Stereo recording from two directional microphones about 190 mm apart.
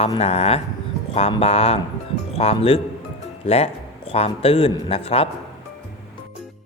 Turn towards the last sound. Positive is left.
turn(degrees=30)  # may be behind; listen again after turning